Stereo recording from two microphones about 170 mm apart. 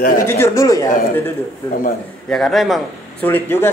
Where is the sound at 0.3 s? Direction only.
15° left (ahead or behind).